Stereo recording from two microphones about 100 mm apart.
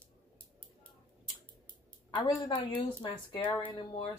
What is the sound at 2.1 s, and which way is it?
A woman's voice, 50° left (ahead or behind).